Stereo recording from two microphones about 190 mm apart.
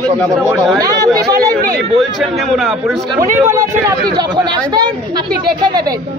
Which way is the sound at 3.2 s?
15° right (ahead or behind).